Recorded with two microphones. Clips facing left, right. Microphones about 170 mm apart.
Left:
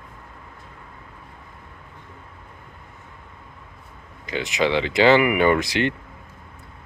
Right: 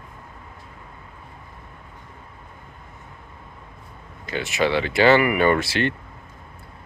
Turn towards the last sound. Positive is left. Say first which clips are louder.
# left 1 dB
turn(degrees=15)  # may be behind; listen again after turning